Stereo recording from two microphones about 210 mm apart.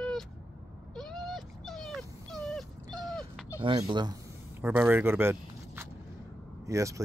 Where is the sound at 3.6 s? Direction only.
20° right (ahead or behind).